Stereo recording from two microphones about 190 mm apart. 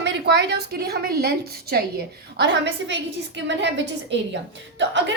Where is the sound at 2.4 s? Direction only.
70° right (ahead or behind).